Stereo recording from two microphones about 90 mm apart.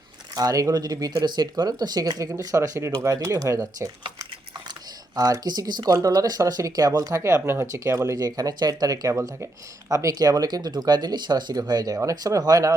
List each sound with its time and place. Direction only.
0.3 s speech: 40° right (ahead or behind)
5.1 s speech: 45° right (ahead or behind)
8.4 s speech: 45° right (ahead or behind)